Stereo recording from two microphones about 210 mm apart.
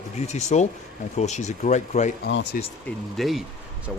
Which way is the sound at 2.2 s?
60° left (ahead or behind).